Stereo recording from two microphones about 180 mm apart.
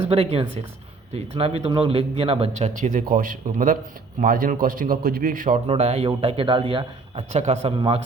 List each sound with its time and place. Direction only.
0.1 s a man's voice: 30° right (ahead or behind); by 5.5 s 50° right (ahead or behind)
5.6 s speech: 35° right (ahead or behind)